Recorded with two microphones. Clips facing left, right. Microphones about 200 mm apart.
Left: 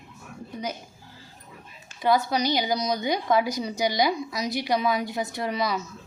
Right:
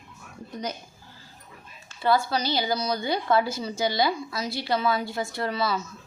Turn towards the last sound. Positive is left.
turn(degrees=15)  # may be behind; listen again after turning